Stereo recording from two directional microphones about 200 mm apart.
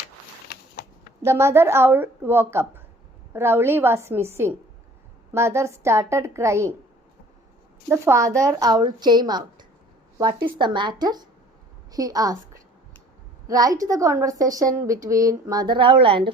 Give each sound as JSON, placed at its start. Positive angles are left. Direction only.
{"t": 0.4, "sound": "a sound", "side_deg": 50}
{"t": 1.2, "sound": "a woman's voice", "side_deg": -15}
{"t": 7.9, "sound": "a woman's voice", "side_deg": -15}